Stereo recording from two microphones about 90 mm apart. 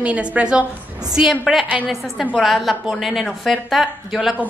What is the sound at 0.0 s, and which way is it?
A woman's voice, 15° right (ahead or behind).